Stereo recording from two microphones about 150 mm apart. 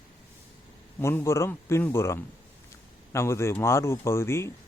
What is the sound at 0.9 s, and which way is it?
Speech, 15° left (ahead or behind).